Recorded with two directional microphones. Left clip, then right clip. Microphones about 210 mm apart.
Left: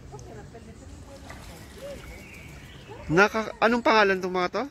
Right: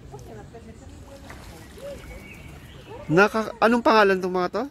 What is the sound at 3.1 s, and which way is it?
Speech, 20° right (ahead or behind).